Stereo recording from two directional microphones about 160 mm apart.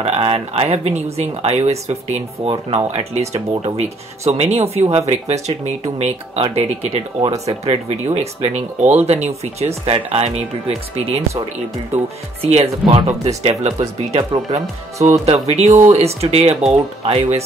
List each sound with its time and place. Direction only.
0.0 s speech: 40° right (ahead or behind)
12.4 s speech: 40° right (ahead or behind)